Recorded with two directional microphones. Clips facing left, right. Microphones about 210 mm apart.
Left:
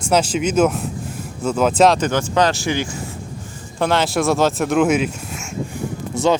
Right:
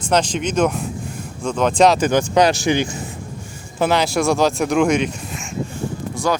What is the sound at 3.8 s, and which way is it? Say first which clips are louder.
Speech: right 1 dB; centre (ahead or behind).